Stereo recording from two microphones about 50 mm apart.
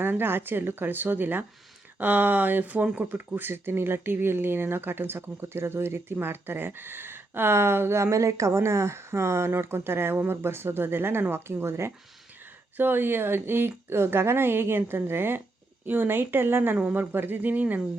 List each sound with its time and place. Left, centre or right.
0.0 s speech: right
3.2 s speech: right
12.7 s speech: right